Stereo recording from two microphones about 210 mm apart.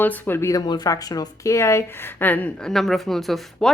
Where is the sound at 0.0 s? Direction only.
10° left (ahead or behind).